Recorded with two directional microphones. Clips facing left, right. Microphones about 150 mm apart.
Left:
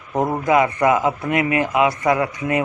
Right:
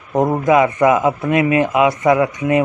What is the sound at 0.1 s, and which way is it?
A man's voice, 20° right (ahead or behind).